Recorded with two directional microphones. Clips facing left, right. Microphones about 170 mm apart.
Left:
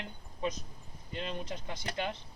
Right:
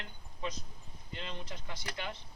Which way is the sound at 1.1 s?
20° left (ahead or behind).